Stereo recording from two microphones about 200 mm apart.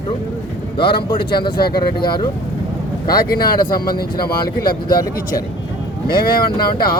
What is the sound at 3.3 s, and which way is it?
Speech, 50° left (ahead or behind).